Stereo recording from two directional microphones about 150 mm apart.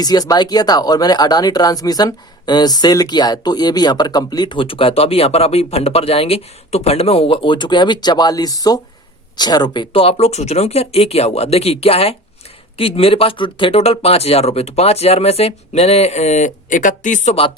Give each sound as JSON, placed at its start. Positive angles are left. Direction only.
{"t": 0.0, "sound": "speech", "side_deg": 25}